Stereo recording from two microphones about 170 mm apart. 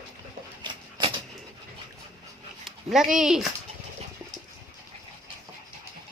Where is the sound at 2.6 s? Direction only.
Centre (ahead or behind).